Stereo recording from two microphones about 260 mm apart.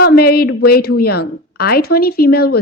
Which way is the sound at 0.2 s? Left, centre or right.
Left.